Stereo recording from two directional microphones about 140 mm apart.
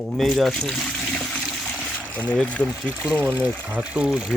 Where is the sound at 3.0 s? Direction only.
10° right (ahead or behind).